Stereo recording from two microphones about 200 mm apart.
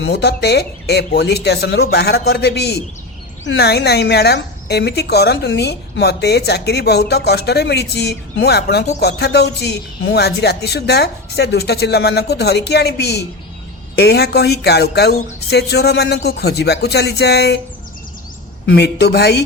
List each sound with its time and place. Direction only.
0.1 s speech: 55° left (ahead or behind)
18.6 s speech: 55° left (ahead or behind)